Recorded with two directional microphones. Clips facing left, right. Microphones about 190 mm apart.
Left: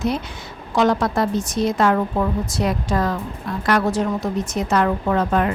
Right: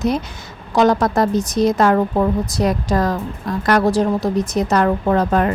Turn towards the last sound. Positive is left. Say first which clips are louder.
# right 3 dB
turn(degrees=-40)  # may be behind; listen again after turning